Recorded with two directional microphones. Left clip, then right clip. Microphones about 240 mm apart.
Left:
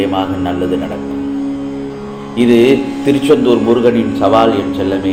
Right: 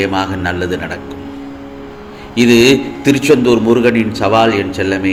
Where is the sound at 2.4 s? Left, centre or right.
Right.